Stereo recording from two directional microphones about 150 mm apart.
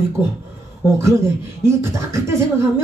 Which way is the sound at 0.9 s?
15° right (ahead or behind).